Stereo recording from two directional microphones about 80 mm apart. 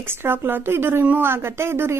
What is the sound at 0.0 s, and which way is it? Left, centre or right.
A woman's voice, right.